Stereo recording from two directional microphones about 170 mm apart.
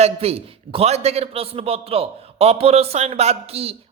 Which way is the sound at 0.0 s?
35° right (ahead or behind).